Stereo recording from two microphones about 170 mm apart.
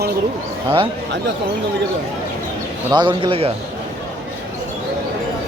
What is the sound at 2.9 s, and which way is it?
Speech, 30° right (ahead or behind).